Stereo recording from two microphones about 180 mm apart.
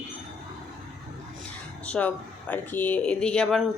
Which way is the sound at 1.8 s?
5° left (ahead or behind).